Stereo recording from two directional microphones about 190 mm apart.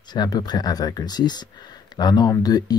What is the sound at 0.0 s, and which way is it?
A man's voice, 20° left (ahead or behind).